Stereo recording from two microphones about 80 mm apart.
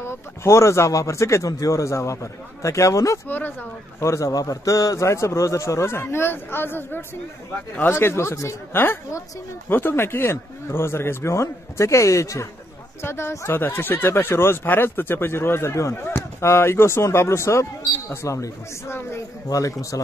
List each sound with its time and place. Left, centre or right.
0.0 s speech: left
3.3 s a man's voice: left
4.0 s a man's voice: left
19.5 s a man's voice: left